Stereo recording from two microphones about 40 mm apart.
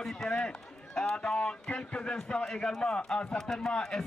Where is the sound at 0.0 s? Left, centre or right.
Centre.